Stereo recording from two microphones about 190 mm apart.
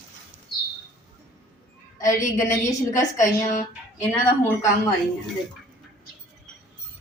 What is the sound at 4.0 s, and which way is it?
Speech, 15° left (ahead or behind).